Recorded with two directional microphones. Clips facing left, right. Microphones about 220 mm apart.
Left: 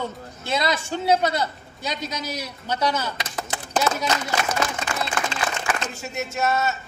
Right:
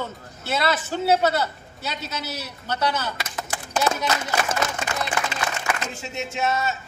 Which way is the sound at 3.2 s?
30° left (ahead or behind).